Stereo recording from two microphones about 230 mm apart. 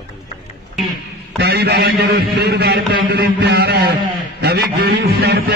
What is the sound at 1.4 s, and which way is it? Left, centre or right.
Music, right.